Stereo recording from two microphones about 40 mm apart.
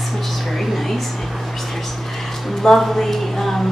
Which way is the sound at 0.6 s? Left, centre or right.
Centre.